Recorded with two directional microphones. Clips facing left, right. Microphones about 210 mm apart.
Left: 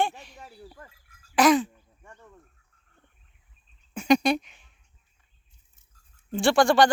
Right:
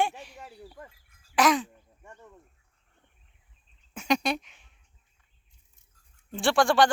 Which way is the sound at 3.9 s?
Centre (ahead or behind).